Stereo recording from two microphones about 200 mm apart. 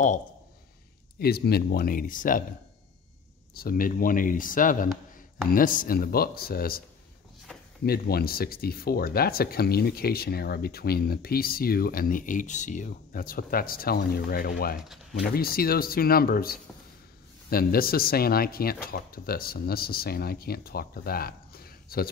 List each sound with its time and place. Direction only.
1.2 s speech: 50° left (ahead or behind)
3.5 s speech: 45° left (ahead or behind)
7.8 s speech: 50° left (ahead or behind)